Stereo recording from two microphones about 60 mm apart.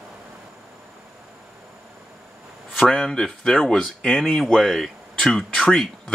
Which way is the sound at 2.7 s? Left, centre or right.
Centre.